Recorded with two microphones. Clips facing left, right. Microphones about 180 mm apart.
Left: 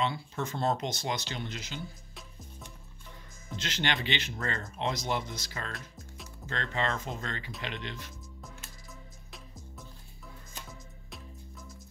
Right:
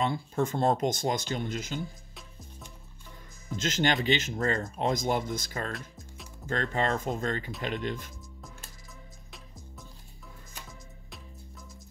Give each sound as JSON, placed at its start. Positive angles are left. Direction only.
{"t": 0.0, "sound": "speech", "side_deg": -50}
{"t": 3.5, "sound": "speech", "side_deg": -45}
{"t": 5.7, "sound": "music", "side_deg": 0}
{"t": 6.4, "sound": "speech", "side_deg": -45}